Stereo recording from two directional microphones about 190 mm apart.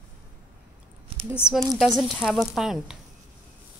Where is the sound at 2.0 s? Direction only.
Centre (ahead or behind).